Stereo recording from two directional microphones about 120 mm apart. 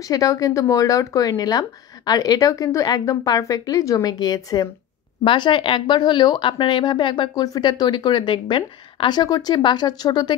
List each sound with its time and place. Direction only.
0.0 s speech: 30° left (ahead or behind)